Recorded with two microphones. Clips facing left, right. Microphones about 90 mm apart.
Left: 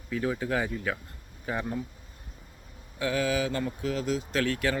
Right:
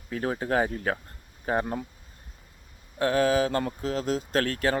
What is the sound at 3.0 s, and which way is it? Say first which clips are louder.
Speech: right 5 dB; 45° right (ahead or behind).